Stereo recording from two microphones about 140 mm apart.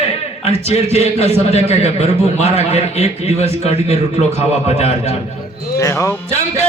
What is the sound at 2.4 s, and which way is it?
Speech, 45° right (ahead or behind).